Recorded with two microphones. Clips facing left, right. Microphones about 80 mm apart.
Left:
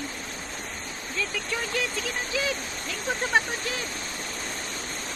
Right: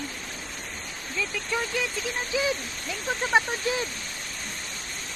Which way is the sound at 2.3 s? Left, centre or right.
Centre.